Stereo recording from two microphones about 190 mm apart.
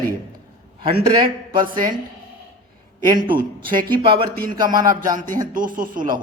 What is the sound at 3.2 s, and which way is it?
Speech, 25° right (ahead or behind).